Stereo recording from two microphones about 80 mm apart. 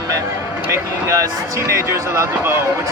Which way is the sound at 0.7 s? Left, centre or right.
Right.